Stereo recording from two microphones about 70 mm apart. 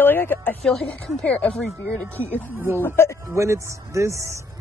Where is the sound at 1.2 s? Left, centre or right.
Centre.